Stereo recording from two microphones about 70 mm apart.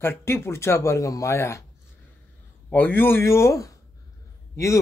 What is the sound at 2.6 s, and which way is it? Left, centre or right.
A man's voice, left.